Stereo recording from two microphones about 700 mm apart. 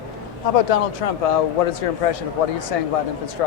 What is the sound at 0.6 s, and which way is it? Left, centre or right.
Speech, left.